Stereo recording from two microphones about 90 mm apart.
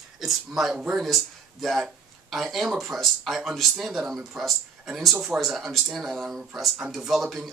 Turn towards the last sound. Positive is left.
turn(degrees=-5)  # may be behind; listen again after turning